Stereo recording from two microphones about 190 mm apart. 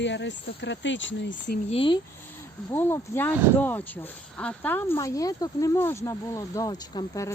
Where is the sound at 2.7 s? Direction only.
10° left (ahead or behind).